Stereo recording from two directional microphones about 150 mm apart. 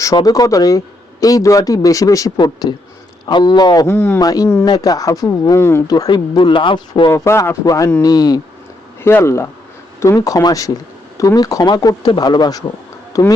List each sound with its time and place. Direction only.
0.0 s speech: 25° left (ahead or behind)
7.1 s speech: 15° left (ahead or behind)